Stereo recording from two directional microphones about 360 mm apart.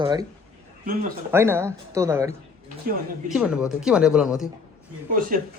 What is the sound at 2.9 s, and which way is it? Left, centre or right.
Speech, right.